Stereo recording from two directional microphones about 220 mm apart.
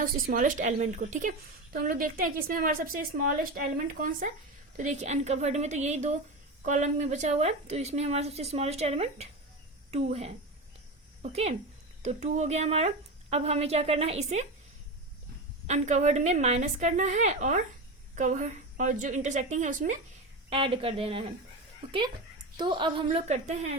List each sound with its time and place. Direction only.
0.0 s a woman's voice: 40° right (ahead or behind)
15.6 s a woman's voice: 30° right (ahead or behind)
20.5 s a woman's voice: 25° right (ahead or behind)
22.5 s a woman's voice: 20° right (ahead or behind)